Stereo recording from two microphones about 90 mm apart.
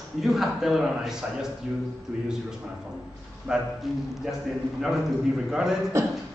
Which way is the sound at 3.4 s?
5° right (ahead or behind).